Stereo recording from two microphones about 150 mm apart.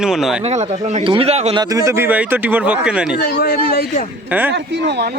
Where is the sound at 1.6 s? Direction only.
25° right (ahead or behind); by 3.2 s 5° right (ahead or behind).